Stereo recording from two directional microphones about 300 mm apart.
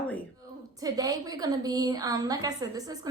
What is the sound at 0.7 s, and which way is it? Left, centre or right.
Speech, centre.